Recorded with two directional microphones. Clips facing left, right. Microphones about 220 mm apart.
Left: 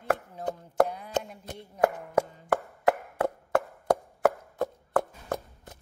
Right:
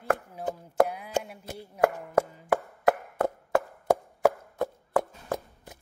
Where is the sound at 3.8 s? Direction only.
10° right (ahead or behind).